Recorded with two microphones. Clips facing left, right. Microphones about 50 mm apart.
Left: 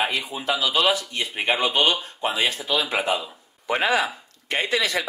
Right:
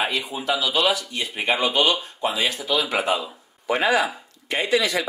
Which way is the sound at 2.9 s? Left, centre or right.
Centre.